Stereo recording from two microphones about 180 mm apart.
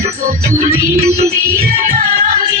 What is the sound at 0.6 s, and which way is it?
Music, 40° right (ahead or behind).